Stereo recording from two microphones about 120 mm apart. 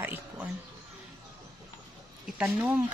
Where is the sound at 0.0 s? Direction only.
15° right (ahead or behind).